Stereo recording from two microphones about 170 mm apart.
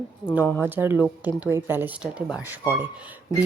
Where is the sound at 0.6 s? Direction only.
10° right (ahead or behind).